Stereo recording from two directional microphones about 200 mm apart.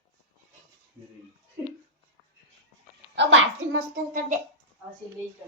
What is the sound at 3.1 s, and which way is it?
Speech, 65° right (ahead or behind).